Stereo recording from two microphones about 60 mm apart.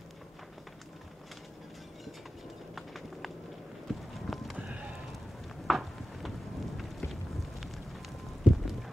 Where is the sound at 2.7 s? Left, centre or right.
Centre.